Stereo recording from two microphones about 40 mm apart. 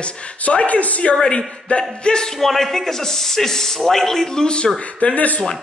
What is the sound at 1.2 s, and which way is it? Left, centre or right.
Speech, left.